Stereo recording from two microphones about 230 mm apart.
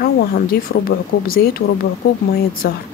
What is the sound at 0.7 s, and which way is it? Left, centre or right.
Speech, left.